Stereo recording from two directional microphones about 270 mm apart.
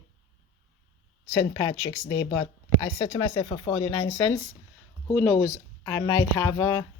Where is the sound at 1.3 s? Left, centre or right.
Centre.